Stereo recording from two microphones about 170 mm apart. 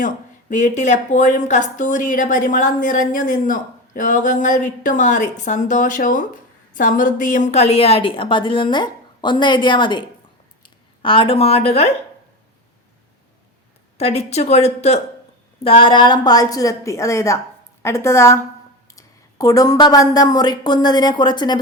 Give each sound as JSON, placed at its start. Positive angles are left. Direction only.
{"t": 0.5, "sound": "speech", "side_deg": 45}
{"t": 14.0, "sound": "a woman's voice", "side_deg": 40}